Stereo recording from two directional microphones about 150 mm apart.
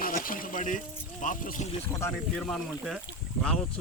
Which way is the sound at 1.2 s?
60° left (ahead or behind).